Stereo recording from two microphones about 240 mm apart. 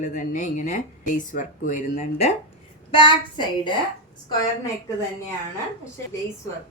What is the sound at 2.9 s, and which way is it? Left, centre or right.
Speech, left.